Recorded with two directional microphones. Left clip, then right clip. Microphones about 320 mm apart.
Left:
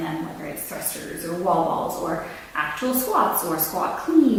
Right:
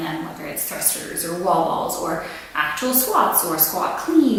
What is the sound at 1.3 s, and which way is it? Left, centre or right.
A woman's voice, centre.